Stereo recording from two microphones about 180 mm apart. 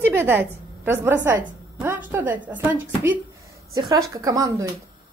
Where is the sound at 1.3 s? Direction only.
10° right (ahead or behind).